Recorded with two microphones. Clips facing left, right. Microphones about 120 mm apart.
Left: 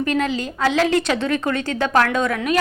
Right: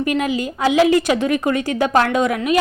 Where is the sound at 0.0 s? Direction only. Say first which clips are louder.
Right 2 dB; 10° right (ahead or behind).